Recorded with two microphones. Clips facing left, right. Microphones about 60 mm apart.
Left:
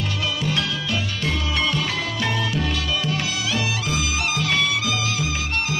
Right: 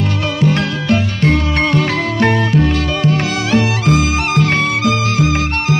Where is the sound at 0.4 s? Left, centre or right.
Right.